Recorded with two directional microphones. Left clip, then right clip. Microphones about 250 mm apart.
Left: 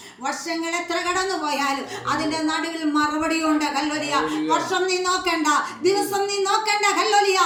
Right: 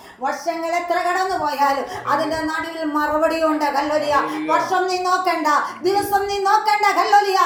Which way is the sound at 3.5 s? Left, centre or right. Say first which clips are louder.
Right 4 dB; centre.